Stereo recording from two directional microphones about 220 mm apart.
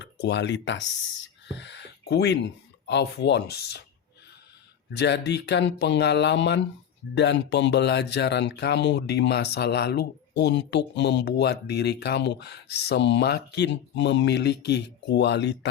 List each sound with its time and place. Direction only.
0.0 s speech: 50° left (ahead or behind)
4.9 s speech: 50° left (ahead or behind)